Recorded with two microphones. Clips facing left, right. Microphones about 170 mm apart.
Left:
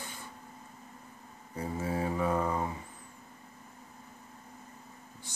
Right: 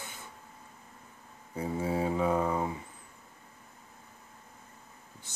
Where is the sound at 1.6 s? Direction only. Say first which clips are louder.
Right 2 dB; 15° right (ahead or behind).